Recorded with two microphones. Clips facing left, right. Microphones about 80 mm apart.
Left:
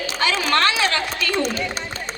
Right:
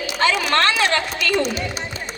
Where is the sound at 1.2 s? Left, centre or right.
Left.